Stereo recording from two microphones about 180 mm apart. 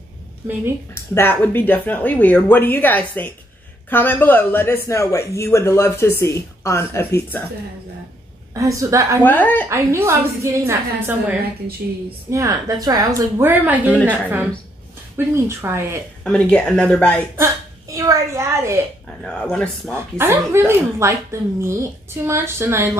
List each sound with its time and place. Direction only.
0.9 s a woman's voice: 15° left (ahead or behind)
8.5 s a woman's voice: 15° right (ahead or behind)
9.2 s a woman's voice: 10° left (ahead or behind)
9.7 s a woman's voice: 15° right (ahead or behind)
13.9 s a woman's voice: 10° left (ahead or behind)
15.1 s a woman's voice: 15° right (ahead or behind)
16.3 s speech: 5° left (ahead or behind)
17.4 s a sound: 20° right (ahead or behind)
19.2 s speech: 5° left (ahead or behind)
20.2 s a woman's voice: 15° right (ahead or behind)